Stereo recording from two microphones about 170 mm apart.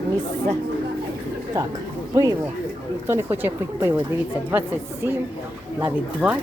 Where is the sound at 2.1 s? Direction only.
20° right (ahead or behind).